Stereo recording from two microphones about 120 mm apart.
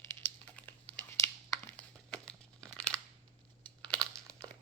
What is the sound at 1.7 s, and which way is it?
Crumpling, 10° left (ahead or behind).